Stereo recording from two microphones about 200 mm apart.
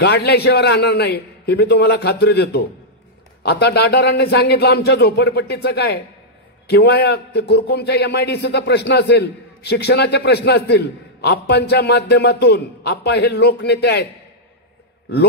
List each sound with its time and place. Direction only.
0.0 s a man's voice: 55° left (ahead or behind)